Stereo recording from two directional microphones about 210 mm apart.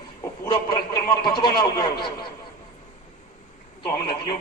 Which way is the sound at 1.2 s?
20° left (ahead or behind).